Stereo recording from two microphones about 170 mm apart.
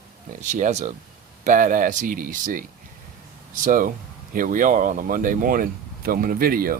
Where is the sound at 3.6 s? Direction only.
55° right (ahead or behind).